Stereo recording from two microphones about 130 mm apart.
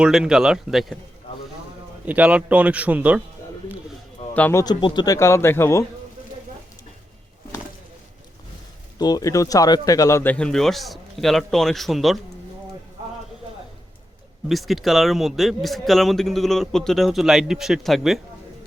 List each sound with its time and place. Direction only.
0.0 s a man's voice: 5° right (ahead or behind)
2.0 s a man's voice: 10° right (ahead or behind)
4.4 s speech: 15° left (ahead or behind)
4.6 s a man's voice: 35° left (ahead or behind); by 5.8 s 20° left (ahead or behind)
9.0 s a man's voice: 30° left (ahead or behind)
10.3 s a man's voice: 5° left (ahead or behind)
14.4 s a man's voice: centre (ahead or behind)